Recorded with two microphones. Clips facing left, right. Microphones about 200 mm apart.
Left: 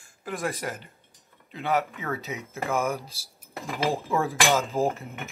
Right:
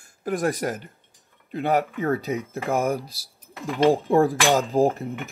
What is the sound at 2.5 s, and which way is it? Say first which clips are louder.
Speech: right 2 dB; 35° right (ahead or behind).